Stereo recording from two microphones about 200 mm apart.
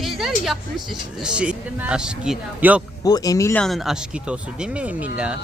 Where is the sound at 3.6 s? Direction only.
Centre (ahead or behind).